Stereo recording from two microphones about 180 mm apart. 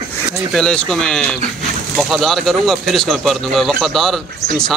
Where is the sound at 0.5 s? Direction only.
5° left (ahead or behind).